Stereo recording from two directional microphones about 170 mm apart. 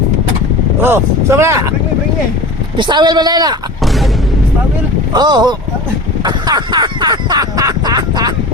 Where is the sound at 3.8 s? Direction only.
Centre (ahead or behind).